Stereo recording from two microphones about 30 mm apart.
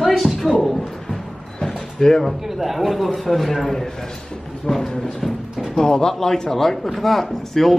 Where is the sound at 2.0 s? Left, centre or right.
Left.